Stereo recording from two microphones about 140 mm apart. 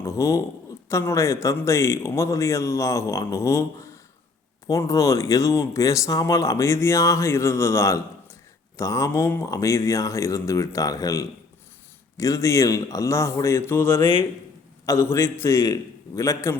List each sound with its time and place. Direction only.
0.0 s speech: 20° left (ahead or behind)
14.0 s a man's voice: 35° left (ahead or behind)
14.8 s speech: 20° left (ahead or behind)